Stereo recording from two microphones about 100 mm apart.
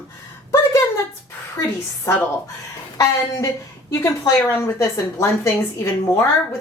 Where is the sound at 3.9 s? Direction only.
35° left (ahead or behind).